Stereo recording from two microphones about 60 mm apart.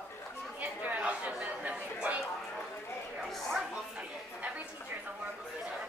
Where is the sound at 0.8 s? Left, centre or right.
Right.